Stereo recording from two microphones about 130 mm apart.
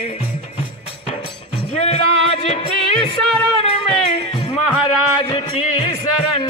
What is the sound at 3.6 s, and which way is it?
Music, 50° left (ahead or behind).